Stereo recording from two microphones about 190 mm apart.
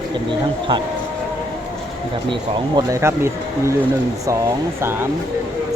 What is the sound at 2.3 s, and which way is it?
Speech, 20° right (ahead or behind).